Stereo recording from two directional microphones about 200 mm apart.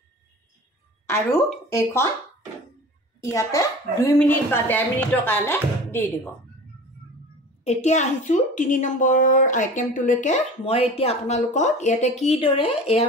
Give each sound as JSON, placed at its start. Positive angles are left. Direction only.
{"t": 1.0, "sound": "speech", "side_deg": 10}
{"t": 3.2, "sound": "speech", "side_deg": 15}
{"t": 7.6, "sound": "a woman's voice", "side_deg": 35}